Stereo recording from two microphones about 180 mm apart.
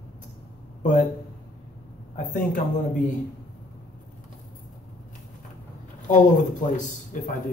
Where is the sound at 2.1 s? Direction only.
45° left (ahead or behind).